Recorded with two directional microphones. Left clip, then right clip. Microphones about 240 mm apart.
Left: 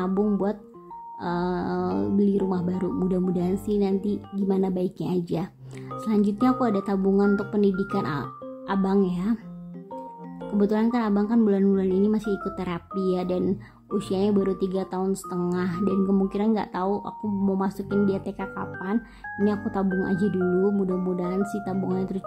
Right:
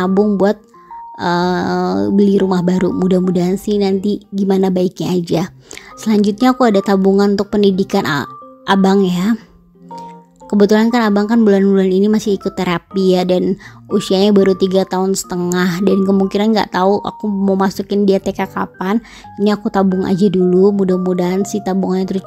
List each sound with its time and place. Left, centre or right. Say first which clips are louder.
0.0 s music: right 12 dB; right
10.6 s music: right 12 dB; right